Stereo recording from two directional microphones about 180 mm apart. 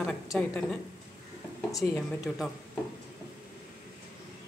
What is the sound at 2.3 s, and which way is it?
Speech, 5° left (ahead or behind).